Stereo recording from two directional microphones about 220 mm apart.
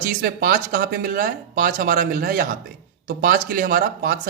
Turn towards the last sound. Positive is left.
turn(degrees=-40)  # may be behind; listen again after turning